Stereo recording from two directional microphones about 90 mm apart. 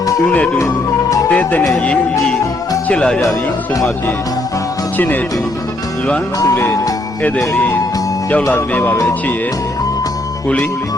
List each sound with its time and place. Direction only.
0.3 s music: 15° left (ahead or behind)
1.3 s speech: 15° left (ahead or behind)
1.8 s music: 10° left (ahead or behind)
4.9 s speech: 20° left (ahead or behind)
6.5 s speech: 25° left (ahead or behind)
7.5 s music: 20° left (ahead or behind)
8.4 s speech: 25° left (ahead or behind)